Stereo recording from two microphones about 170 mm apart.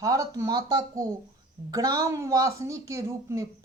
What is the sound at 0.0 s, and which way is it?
A woman's voice, 20° right (ahead or behind).